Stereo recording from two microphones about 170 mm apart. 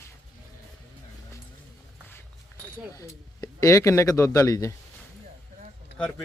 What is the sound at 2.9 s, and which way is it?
Speech, 20° left (ahead or behind).